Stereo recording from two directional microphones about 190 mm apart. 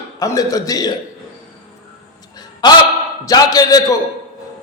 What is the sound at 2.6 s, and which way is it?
A man's voice, 20° left (ahead or behind).